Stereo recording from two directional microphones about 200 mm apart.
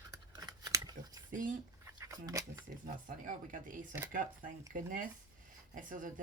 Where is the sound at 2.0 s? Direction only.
15° right (ahead or behind).